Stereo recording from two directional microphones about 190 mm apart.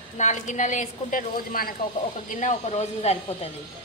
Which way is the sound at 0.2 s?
40° left (ahead or behind).